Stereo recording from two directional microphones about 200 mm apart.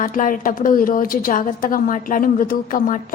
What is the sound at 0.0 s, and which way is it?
A woman's voice, 40° left (ahead or behind).